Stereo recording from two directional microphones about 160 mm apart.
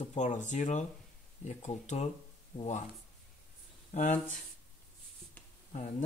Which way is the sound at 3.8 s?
45° left (ahead or behind).